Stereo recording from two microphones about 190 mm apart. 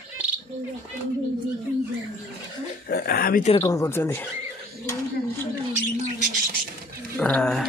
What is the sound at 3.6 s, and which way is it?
Speech, 15° left (ahead or behind).